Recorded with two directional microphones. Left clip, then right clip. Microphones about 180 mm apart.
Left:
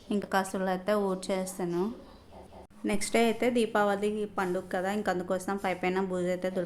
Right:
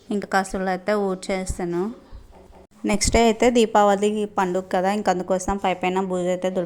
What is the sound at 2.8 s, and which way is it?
Speech, 35° right (ahead or behind).